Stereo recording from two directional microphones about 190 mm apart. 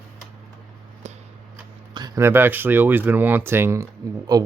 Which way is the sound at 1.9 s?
20° right (ahead or behind).